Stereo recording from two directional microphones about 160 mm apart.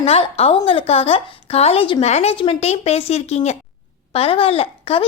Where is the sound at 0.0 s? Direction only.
35° left (ahead or behind).